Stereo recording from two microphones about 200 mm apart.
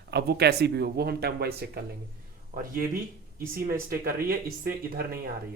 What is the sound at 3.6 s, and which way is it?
Speech, 45° right (ahead or behind).